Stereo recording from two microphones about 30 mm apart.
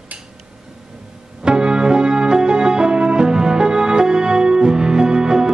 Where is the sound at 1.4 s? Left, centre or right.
Right.